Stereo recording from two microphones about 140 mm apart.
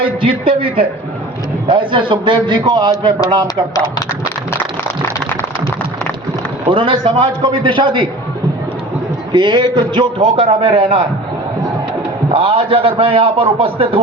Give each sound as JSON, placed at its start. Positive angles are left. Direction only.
{"t": 0.0, "sound": "a man's voice", "side_deg": -40}
{"t": 6.7, "sound": "a man's voice", "side_deg": -40}
{"t": 9.3, "sound": "a man's voice", "side_deg": -35}
{"t": 12.3, "sound": "a man's voice", "side_deg": -40}